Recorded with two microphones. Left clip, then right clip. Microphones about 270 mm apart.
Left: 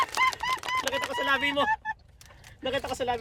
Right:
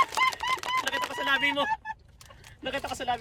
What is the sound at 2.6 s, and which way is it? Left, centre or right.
Speech, centre.